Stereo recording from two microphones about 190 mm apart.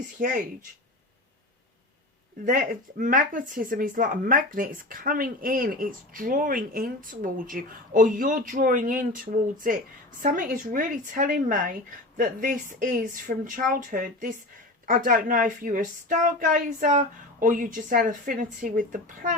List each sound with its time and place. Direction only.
0.2 s speech: 45° right (ahead or behind)
2.4 s speech: 45° right (ahead or behind)